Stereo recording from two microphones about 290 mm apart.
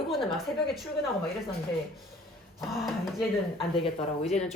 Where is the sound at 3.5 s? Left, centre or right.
Centre.